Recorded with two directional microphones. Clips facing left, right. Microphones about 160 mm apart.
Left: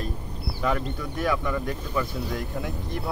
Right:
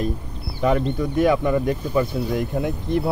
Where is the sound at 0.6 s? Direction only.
25° right (ahead or behind).